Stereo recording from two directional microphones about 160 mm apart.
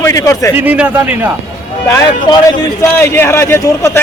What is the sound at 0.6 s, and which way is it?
Speech, 10° right (ahead or behind).